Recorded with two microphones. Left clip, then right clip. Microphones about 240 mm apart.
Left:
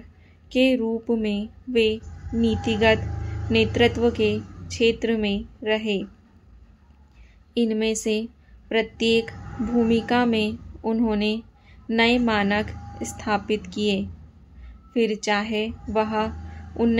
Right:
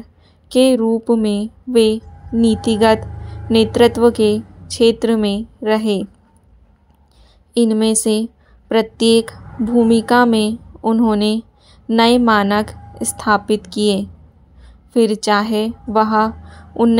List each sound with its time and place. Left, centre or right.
0.5 s a woman's voice: right
7.5 s a woman's voice: right